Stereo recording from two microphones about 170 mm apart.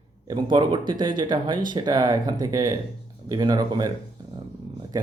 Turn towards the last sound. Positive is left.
turn(degrees=-25)  # may be behind; listen again after turning